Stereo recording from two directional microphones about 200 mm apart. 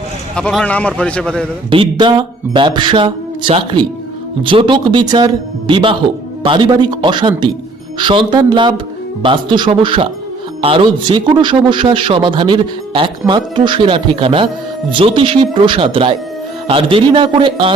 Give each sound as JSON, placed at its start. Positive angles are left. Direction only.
{"t": 0.3, "sound": "a man's voice", "side_deg": 5}
{"t": 1.7, "sound": "a man's voice", "side_deg": -25}